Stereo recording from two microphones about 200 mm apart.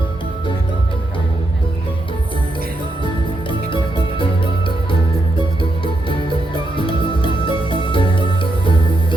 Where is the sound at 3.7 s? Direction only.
25° left (ahead or behind).